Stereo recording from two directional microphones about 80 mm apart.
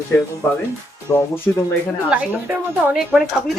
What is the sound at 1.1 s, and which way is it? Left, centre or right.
Speech, left.